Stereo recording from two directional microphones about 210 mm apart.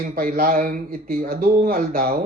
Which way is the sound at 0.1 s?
45° right (ahead or behind).